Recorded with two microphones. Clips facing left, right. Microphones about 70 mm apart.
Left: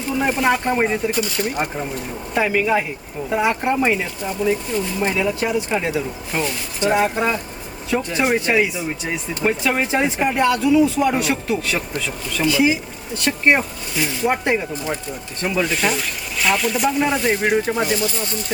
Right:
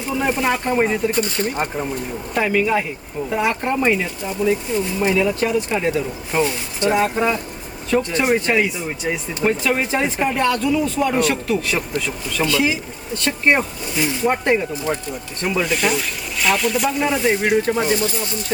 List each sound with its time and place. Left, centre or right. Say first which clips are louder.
0.2 s speech: left 2 dB; centre
1.1 s speech: right 1 dB; right
1.5 s speech: right 1 dB; centre
5.1 s speech: right 3 dB; centre
6.3 s speech: right 4 dB; centre
6.8 s speech: even; centre